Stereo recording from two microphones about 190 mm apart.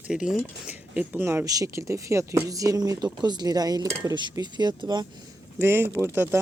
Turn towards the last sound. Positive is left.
turn(degrees=-10)  # may be behind; listen again after turning